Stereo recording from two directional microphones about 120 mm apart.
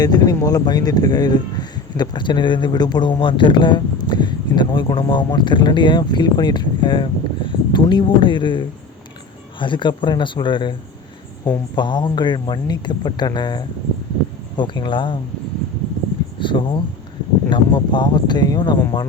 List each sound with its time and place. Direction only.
0.0 s speech: 35° left (ahead or behind)
16.4 s speech: 45° left (ahead or behind)